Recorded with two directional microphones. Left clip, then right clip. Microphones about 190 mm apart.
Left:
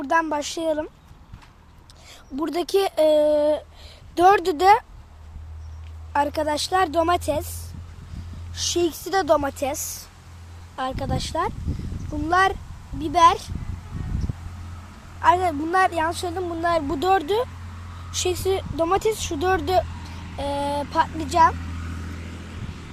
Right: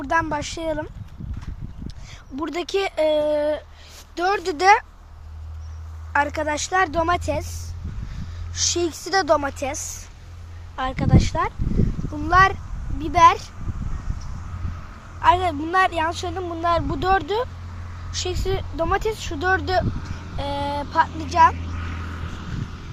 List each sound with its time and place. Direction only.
0.0 s speech: 10° left (ahead or behind)
2.3 s speech: 15° left (ahead or behind)
4.4 s speech: 10° left (ahead or behind)
6.1 s speech: 15° left (ahead or behind)
8.5 s a woman's voice: centre (ahead or behind)
15.2 s speech: 5° left (ahead or behind)
21.6 s vehicle: 45° left (ahead or behind)